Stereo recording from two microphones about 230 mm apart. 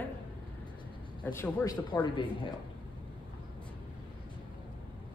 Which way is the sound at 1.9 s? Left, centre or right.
Left.